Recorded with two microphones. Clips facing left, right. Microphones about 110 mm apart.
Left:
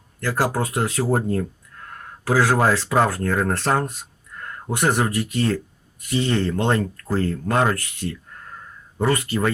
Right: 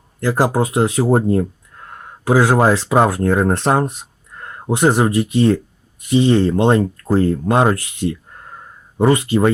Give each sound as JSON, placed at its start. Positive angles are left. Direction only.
{"t": 0.2, "sound": "speech", "side_deg": -20}